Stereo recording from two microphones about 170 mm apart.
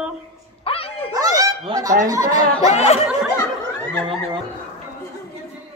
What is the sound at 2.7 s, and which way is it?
Speech, 40° left (ahead or behind).